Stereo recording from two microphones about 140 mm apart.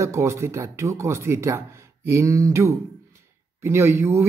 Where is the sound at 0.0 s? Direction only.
20° right (ahead or behind).